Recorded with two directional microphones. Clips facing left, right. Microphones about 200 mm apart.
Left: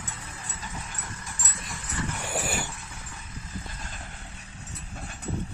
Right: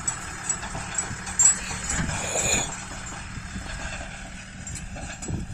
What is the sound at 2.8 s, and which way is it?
Vehicle, 70° right (ahead or behind).